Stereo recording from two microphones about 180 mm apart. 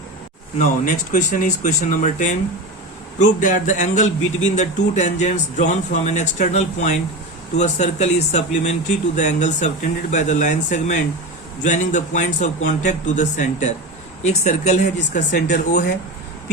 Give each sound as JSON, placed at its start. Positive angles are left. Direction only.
{"t": 0.6, "sound": "a man's voice", "side_deg": 45}